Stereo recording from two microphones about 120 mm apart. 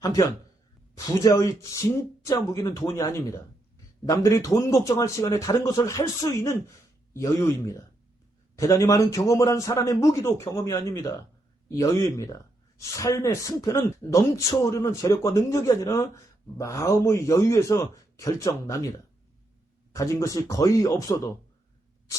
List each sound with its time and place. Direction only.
0.9 s a man's voice: 30° left (ahead or behind)
19.9 s a man's voice: 25° left (ahead or behind)